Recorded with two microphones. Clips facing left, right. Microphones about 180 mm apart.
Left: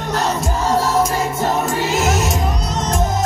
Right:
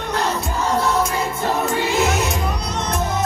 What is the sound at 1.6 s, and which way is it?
Music, 45° left (ahead or behind).